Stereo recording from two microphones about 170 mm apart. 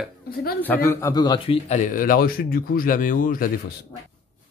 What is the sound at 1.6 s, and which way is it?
Speech, 45° left (ahead or behind).